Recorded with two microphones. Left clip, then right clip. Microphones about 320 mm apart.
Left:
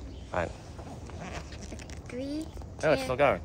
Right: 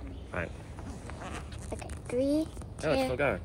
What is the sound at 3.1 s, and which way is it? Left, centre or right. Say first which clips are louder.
Speech: left 5 dB; centre.